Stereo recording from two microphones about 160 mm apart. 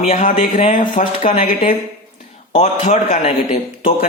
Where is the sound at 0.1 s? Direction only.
50° left (ahead or behind).